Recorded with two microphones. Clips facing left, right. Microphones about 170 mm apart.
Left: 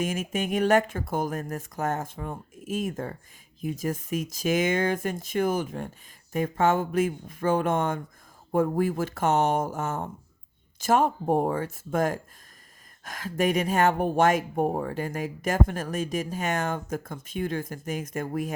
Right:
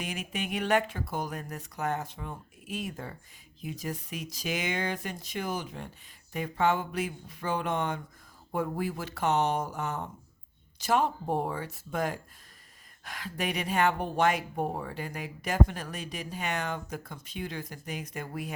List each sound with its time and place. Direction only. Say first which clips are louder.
0.0 s speech: left 7 dB; 45° left (ahead or behind)